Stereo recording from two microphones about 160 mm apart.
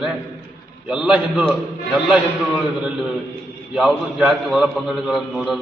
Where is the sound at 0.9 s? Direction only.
5° right (ahead or behind).